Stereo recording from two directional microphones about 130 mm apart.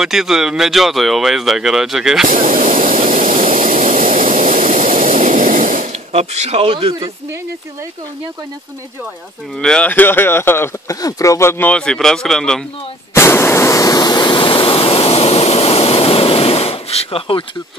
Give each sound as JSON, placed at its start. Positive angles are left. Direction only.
{"t": 0.0, "sound": "speech", "side_deg": -5}
{"t": 2.4, "sound": "vehicle", "side_deg": -90}
{"t": 6.1, "sound": "speech", "side_deg": -55}
{"t": 9.6, "sound": "speech", "side_deg": 5}
{"t": 13.1, "sound": "a sound", "side_deg": 20}